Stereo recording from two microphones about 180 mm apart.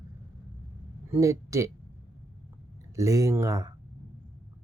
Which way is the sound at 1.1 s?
15° right (ahead or behind).